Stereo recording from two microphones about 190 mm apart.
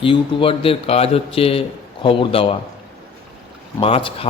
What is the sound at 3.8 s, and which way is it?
Speech, 30° left (ahead or behind).